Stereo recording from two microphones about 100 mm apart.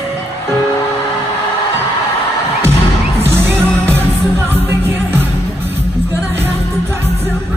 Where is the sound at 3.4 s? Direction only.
25° right (ahead or behind).